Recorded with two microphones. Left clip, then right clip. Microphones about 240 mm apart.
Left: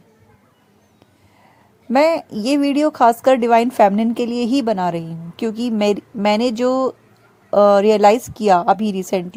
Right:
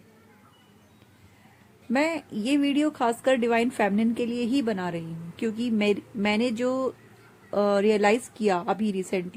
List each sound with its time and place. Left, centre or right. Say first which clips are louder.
1.9 s speech: left 11 dB; left